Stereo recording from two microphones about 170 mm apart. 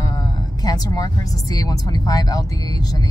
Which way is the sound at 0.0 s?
20° left (ahead or behind).